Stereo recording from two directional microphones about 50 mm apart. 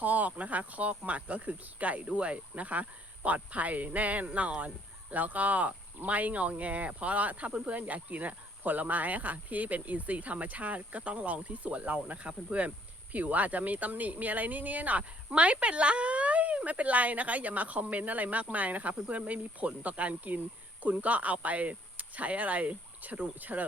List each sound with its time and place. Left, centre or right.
0.0 s speech: right